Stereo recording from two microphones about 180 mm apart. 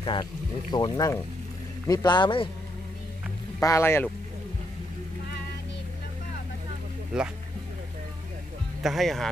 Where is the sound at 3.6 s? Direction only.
15° left (ahead or behind).